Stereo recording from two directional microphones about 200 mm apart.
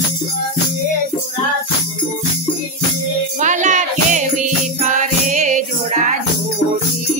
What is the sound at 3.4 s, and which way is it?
Music, 40° right (ahead or behind).